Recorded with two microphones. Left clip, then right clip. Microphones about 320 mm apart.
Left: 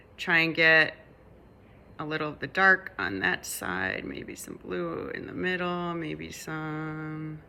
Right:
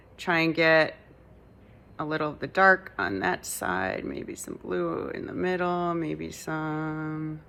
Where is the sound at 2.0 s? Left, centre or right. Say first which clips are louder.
Right 3 dB; centre.